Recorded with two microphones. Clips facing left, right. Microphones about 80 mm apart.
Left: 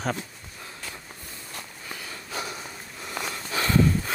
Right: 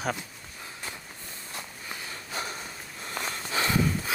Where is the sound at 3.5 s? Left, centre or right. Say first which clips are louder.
Left 4 dB; centre.